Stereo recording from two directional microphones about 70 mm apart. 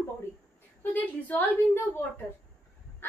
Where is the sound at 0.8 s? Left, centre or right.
Left.